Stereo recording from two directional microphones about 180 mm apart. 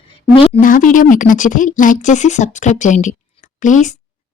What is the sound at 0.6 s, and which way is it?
Speech, 50° left (ahead or behind).